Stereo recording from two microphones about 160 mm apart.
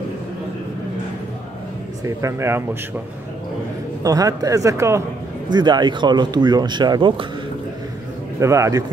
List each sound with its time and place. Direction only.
2.0 s speech: 20° right (ahead or behind)
4.0 s speech: 20° right (ahead or behind)
8.4 s speech: 20° right (ahead or behind)